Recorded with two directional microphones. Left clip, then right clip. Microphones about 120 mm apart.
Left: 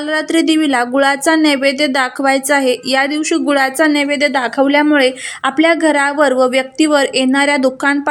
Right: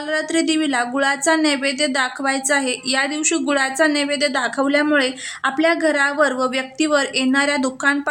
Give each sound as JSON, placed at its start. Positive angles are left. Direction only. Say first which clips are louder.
{"t": 0.1, "sound": "speech", "louder": "left 5 dB", "side_deg": 25}